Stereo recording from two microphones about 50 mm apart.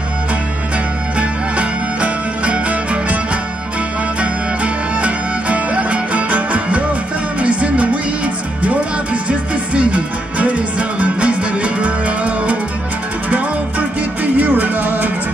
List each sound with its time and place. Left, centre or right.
1.1 s music: right
5.0 s music: right